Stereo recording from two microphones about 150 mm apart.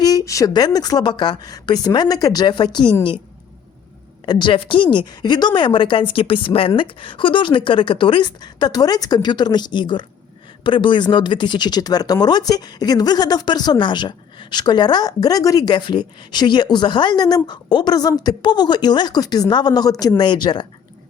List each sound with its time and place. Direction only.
0.0 s speech: 25° left (ahead or behind)
4.3 s a woman's voice: 30° left (ahead or behind)